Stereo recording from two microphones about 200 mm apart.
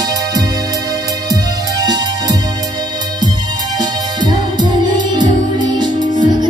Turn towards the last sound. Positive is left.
turn(degrees=-20)  # may be behind; listen again after turning